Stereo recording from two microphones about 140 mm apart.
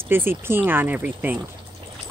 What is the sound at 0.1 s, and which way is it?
Speech, 15° right (ahead or behind).